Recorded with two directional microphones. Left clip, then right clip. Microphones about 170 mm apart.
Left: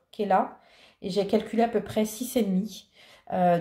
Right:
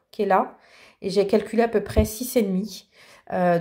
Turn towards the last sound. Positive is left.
turn(degrees=-30)  # may be behind; listen again after turning